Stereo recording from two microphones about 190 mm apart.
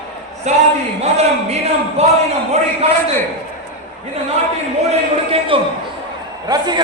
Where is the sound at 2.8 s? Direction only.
35° right (ahead or behind).